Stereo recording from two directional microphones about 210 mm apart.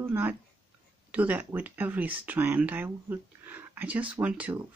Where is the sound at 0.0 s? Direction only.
10° right (ahead or behind).